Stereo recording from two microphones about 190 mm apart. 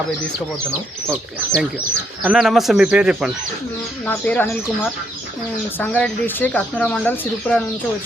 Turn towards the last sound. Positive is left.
turn(degrees=5)  # may be behind; listen again after turning